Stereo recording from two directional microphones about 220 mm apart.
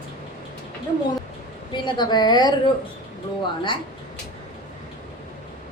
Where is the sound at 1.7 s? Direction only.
20° left (ahead or behind).